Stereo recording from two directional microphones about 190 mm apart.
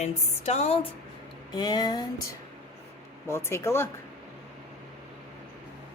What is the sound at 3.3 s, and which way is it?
Speech, 15° left (ahead or behind).